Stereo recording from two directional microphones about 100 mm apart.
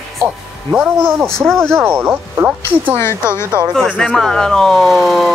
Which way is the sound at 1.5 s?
5° left (ahead or behind).